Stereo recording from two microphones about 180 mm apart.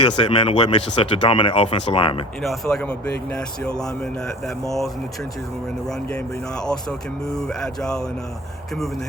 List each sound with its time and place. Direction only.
0.2 s speech: 30° left (ahead or behind)
2.4 s speech: centre (ahead or behind)
5.9 s speech: 5° left (ahead or behind)